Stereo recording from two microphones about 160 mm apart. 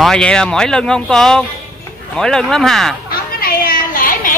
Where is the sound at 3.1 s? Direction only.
70° left (ahead or behind).